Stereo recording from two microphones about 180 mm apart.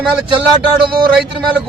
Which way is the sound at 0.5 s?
25° right (ahead or behind).